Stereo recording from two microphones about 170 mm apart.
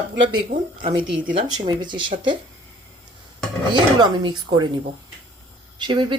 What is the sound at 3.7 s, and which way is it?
Speech, 25° right (ahead or behind).